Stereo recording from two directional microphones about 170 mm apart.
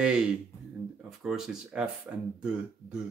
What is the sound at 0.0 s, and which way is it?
Speech, 5° right (ahead or behind).